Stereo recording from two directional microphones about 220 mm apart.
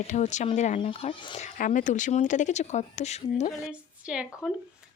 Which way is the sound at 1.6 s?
35° left (ahead or behind).